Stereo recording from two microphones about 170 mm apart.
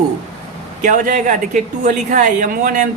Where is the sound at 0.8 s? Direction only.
50° right (ahead or behind).